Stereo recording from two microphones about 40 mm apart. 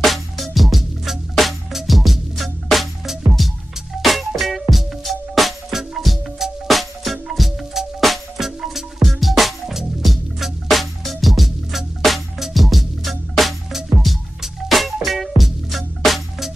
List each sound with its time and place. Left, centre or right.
0.0 s music: centre